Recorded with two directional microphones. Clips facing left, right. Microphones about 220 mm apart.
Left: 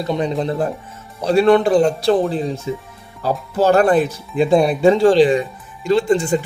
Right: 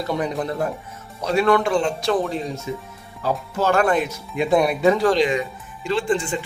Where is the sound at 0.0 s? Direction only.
25° left (ahead or behind).